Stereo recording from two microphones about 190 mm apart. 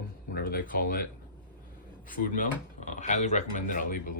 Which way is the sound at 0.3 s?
50° left (ahead or behind).